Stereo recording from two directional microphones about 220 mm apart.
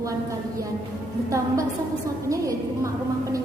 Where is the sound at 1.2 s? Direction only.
15° right (ahead or behind).